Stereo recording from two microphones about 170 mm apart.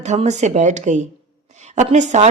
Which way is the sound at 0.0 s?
40° right (ahead or behind).